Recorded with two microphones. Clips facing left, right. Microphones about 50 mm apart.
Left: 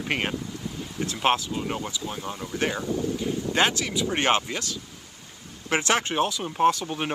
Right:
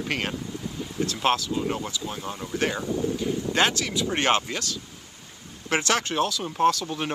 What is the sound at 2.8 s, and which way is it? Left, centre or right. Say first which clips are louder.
Speech: right 1 dB; right.